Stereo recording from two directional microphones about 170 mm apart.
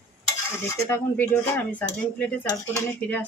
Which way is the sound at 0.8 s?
10° left (ahead or behind).